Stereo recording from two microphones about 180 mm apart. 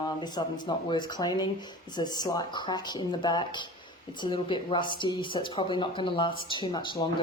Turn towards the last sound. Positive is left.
turn(degrees=25)  # may be behind; listen again after turning